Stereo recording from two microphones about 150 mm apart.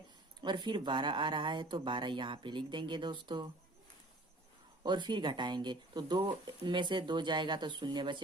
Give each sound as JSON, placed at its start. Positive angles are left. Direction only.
{"t": 0.4, "sound": "speech", "side_deg": -30}
{"t": 4.8, "sound": "speech", "side_deg": -30}